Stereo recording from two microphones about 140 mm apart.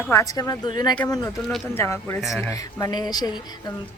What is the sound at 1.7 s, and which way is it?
A woman's voice, 15° left (ahead or behind).